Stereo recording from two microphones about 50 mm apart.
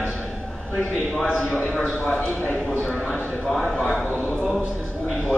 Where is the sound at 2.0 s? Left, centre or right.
Left.